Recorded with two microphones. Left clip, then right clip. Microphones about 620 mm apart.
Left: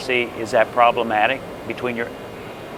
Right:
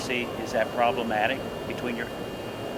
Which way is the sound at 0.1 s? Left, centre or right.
Left.